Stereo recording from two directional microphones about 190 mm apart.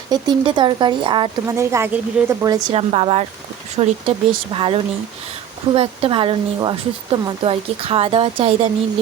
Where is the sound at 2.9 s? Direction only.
35° right (ahead or behind).